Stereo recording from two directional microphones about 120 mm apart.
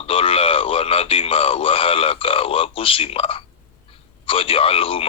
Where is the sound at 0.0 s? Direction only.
50° left (ahead or behind).